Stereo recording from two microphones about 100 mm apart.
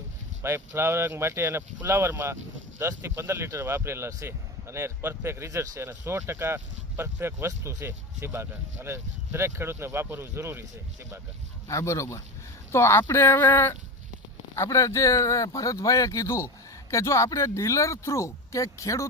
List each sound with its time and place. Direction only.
0.4 s speech: 25° right (ahead or behind)
11.7 s speech: 30° left (ahead or behind)